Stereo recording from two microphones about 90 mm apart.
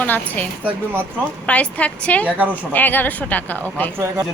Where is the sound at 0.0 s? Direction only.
15° left (ahead or behind).